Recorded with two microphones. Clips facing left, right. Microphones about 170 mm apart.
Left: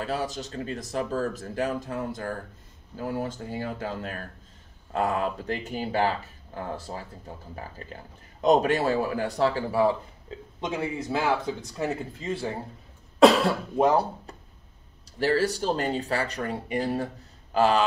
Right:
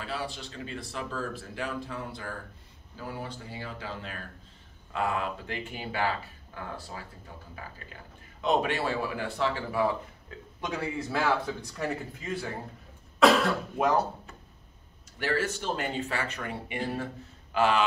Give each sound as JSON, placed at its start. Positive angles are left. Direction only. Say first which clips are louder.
{"t": 0.0, "sound": "speech", "louder": "left 6 dB", "side_deg": 40}
{"t": 10.6, "sound": "speech", "louder": "left 3 dB", "side_deg": 20}
{"t": 13.7, "sound": "speech", "louder": "left 5 dB", "side_deg": 30}